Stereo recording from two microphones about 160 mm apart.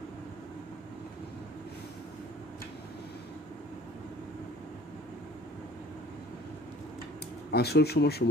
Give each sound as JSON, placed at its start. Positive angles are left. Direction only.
{"t": 7.5, "sound": "speech", "side_deg": 90}